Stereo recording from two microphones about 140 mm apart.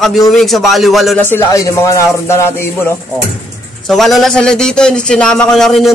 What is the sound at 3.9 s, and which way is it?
A man's voice, centre (ahead or behind).